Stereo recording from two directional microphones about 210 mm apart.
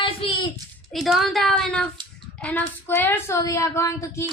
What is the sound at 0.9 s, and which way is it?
Speech, centre (ahead or behind).